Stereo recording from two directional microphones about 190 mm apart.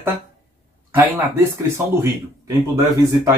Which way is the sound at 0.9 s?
10° right (ahead or behind).